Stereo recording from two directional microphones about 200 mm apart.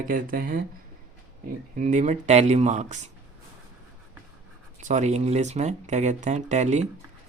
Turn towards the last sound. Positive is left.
turn(degrees=-35)  # may be behind; listen again after turning